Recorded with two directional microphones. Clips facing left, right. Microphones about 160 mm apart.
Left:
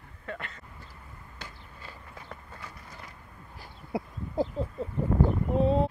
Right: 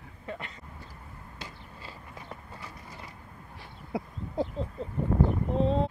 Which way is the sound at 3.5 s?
Centre (ahead or behind).